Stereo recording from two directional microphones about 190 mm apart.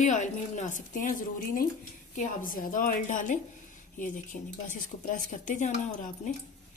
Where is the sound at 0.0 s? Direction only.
40° left (ahead or behind).